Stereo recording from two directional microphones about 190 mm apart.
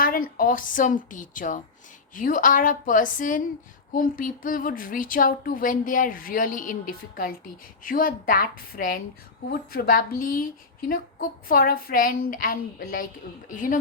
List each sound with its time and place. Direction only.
0.0 s a woman's voice: 50° left (ahead or behind)